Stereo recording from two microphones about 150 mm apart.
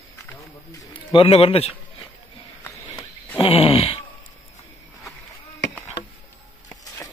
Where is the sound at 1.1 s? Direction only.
40° left (ahead or behind).